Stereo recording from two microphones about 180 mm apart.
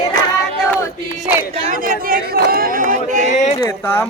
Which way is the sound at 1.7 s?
50° right (ahead or behind).